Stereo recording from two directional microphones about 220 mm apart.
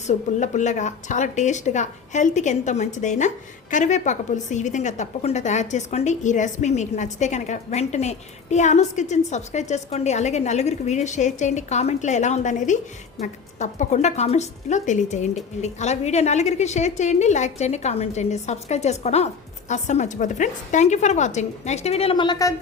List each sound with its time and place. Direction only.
0.1 s a woman's voice: 35° left (ahead or behind); by 22.5 s 15° left (ahead or behind)